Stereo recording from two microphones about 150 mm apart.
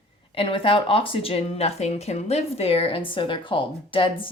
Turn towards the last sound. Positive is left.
turn(degrees=35)  # may be behind; listen again after turning